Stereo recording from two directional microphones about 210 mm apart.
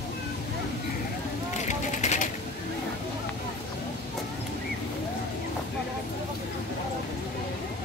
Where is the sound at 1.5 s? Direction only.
35° left (ahead or behind).